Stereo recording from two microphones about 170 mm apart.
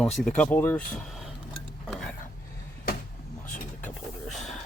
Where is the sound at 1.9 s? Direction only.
Centre (ahead or behind).